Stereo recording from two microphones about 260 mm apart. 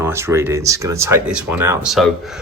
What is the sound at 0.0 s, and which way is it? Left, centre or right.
A man's voice, centre.